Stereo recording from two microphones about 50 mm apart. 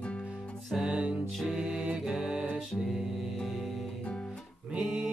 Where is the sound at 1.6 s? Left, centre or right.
Centre.